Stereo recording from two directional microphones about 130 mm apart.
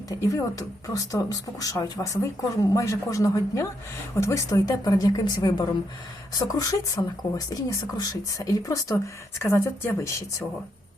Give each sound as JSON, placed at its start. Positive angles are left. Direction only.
{"t": 0.1, "sound": "speech", "side_deg": 25}